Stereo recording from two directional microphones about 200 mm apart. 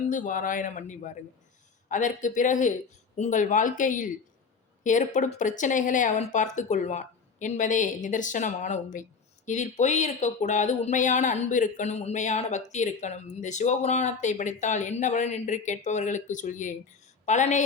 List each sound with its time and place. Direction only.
0.1 s speech: 40° left (ahead or behind)